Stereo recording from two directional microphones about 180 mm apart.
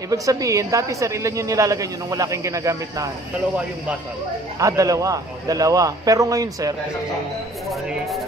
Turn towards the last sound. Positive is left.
turn(degrees=-20)  # may be behind; listen again after turning